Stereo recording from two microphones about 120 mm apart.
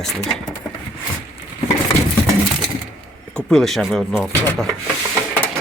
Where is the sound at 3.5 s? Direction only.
5° left (ahead or behind).